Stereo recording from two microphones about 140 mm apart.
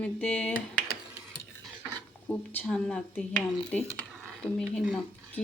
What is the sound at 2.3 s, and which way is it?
Speech, 15° left (ahead or behind).